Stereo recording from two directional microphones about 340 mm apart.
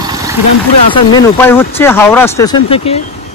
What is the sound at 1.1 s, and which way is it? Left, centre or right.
Speech, centre.